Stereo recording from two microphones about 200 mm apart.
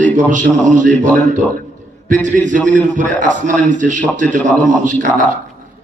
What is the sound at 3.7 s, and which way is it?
A man's voice, 40° right (ahead or behind).